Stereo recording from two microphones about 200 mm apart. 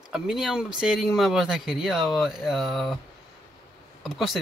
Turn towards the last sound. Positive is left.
turn(degrees=0)  # may be behind; listen again after turning